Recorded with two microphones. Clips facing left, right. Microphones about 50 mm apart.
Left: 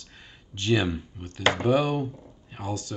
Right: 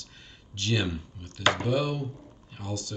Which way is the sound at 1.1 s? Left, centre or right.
Left.